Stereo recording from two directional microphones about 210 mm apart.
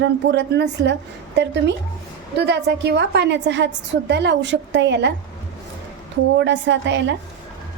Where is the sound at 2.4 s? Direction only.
55° right (ahead or behind).